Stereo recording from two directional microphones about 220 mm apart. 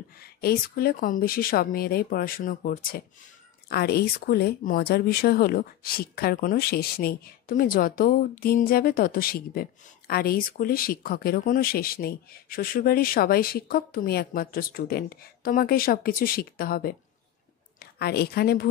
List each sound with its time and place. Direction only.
0.2 s a woman's voice: 45° left (ahead or behind)